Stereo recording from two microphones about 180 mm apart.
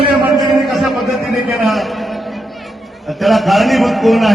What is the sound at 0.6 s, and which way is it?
A man's voice, centre (ahead or behind).